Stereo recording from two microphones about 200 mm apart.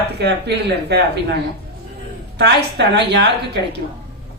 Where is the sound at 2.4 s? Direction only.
55° right (ahead or behind).